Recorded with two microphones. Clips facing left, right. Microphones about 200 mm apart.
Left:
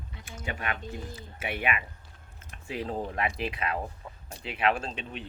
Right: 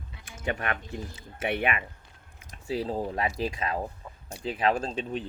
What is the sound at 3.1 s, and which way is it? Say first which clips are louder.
Speech: right 2 dB; 35° right (ahead or behind).